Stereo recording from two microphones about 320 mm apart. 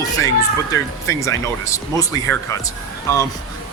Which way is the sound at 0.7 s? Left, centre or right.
Centre.